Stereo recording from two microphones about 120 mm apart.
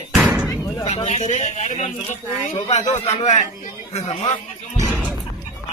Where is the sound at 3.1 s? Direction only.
60° left (ahead or behind).